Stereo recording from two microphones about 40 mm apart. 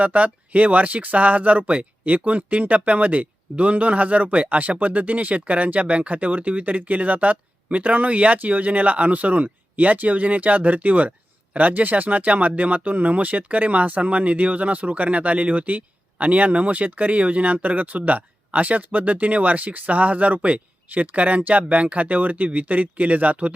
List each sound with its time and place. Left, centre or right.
0.0 s speech: right